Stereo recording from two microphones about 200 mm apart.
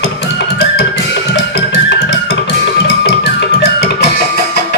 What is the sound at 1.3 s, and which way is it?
Music, 60° left (ahead or behind).